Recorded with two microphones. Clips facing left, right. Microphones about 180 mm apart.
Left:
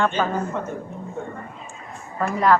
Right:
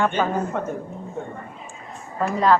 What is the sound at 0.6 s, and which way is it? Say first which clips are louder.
Speech: right 2 dB; 55° right (ahead or behind).